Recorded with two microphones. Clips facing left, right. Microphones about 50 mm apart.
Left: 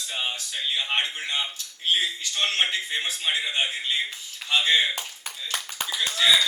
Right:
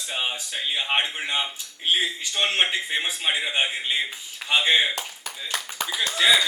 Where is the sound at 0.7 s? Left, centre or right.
Right.